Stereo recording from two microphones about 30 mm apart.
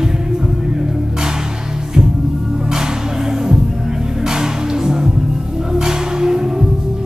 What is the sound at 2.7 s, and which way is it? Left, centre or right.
Music, centre.